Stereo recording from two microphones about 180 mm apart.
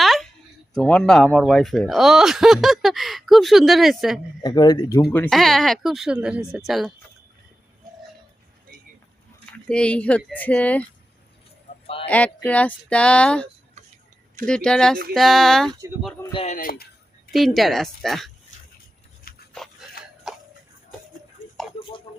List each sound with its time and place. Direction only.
0.0 s a sound: centre (ahead or behind)
0.7 s speech: 5° left (ahead or behind)
4.4 s speech: 25° left (ahead or behind)
5.1 s speech: 5° left (ahead or behind)
9.5 s speech: 5° left (ahead or behind)
12.0 s speech: 10° left (ahead or behind)
16.3 s speech: 35° left (ahead or behind)
16.6 s speech: 55° left (ahead or behind)
17.3 s speech: centre (ahead or behind)
19.3 s dog: 55° left (ahead or behind)
20.3 s a sound: 5° right (ahead or behind)
21.4 s a sound: 45° left (ahead or behind)
21.8 s tick-tock: 30° left (ahead or behind)